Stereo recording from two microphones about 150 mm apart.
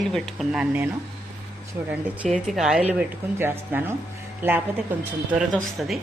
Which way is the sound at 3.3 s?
15° right (ahead or behind).